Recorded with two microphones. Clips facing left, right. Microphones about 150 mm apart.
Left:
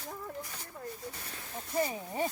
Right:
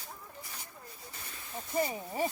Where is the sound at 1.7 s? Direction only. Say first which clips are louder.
Even; 10° right (ahead or behind).